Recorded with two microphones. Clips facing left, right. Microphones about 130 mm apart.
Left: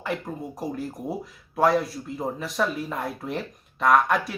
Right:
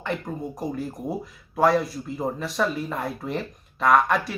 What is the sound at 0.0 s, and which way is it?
Speech, 5° left (ahead or behind).